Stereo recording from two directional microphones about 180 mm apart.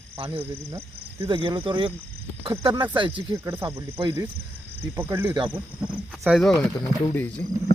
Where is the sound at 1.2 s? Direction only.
25° right (ahead or behind).